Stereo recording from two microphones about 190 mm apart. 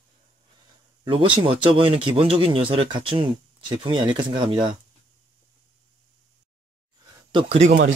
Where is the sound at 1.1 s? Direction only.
25° right (ahead or behind).